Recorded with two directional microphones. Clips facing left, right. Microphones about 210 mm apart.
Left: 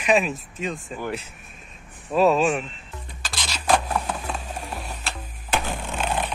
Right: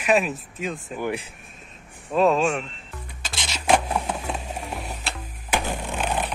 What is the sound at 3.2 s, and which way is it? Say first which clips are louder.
Rub: even; 25° right (ahead or behind).